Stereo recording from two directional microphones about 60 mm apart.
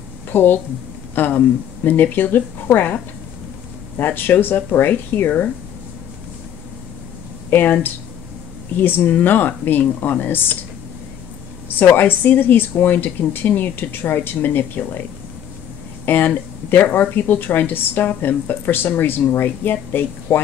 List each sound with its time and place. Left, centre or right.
0.3 s a woman's voice: left
4.0 s speech: left
7.5 s speech: left
11.8 s speech: left
16.1 s speech: left